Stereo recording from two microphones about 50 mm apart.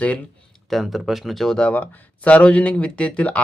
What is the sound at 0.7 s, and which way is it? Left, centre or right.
Speech, centre.